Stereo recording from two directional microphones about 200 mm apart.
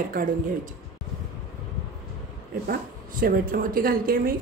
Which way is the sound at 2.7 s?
45° right (ahead or behind).